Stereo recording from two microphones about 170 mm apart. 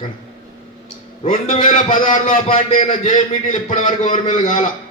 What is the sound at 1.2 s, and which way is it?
A man's voice, 40° left (ahead or behind).